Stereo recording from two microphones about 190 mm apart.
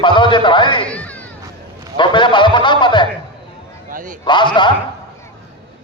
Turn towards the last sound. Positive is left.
turn(degrees=25)  # may be behind; listen again after turning